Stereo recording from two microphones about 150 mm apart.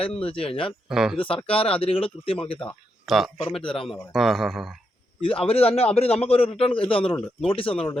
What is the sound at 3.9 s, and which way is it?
Speech, centre (ahead or behind).